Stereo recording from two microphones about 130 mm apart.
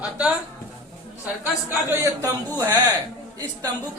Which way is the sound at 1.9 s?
20° right (ahead or behind).